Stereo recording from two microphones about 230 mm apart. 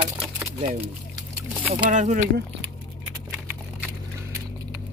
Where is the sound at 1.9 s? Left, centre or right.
Right.